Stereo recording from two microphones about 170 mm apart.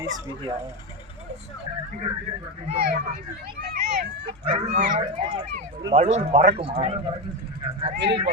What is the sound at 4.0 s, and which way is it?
Dog, 75° right (ahead or behind).